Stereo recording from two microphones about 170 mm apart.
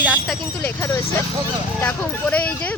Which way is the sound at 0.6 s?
15° left (ahead or behind).